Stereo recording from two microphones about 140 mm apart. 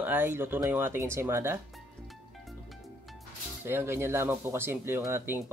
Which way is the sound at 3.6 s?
15° right (ahead or behind).